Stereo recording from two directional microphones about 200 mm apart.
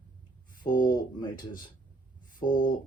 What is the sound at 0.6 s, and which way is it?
Speech, 20° left (ahead or behind).